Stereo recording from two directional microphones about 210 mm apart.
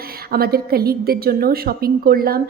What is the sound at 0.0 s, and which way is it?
A woman's voice, 45° right (ahead or behind).